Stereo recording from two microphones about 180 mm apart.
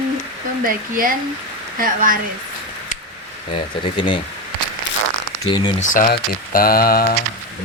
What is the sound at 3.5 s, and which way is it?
Speech, 25° left (ahead or behind).